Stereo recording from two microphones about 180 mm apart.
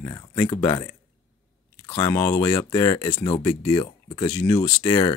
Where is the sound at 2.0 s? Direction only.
15° left (ahead or behind).